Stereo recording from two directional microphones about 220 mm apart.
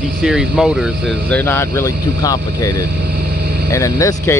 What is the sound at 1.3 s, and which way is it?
Speech, 10° left (ahead or behind).